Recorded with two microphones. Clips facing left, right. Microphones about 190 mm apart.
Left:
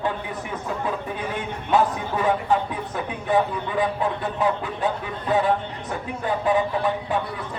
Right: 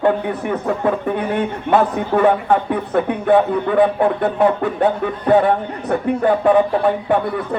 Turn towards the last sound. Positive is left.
turn(degrees=-60)  # may be behind; listen again after turning